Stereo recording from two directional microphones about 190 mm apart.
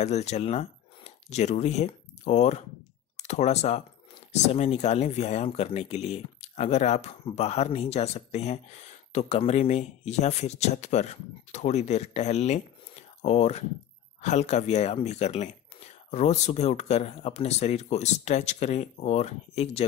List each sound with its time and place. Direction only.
0.0 s speech: 35° left (ahead or behind)